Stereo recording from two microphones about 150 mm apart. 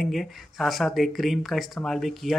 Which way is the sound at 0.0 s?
Centre (ahead or behind).